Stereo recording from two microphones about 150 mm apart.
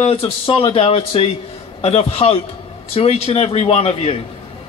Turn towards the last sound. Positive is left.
turn(degrees=40)  # may be behind; listen again after turning